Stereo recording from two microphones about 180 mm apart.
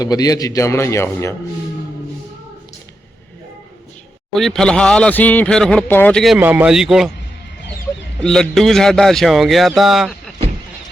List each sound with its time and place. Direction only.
0.0 s a man's voice: 20° left (ahead or behind)
4.4 s speech: centre (ahead or behind)
6.4 s speech: 10° right (ahead or behind)
8.2 s speech: 5° left (ahead or behind)